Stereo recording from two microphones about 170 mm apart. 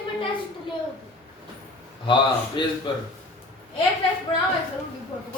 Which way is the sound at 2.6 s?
30° left (ahead or behind).